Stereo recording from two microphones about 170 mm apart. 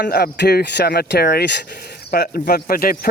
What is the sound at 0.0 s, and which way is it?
Speech, 70° left (ahead or behind).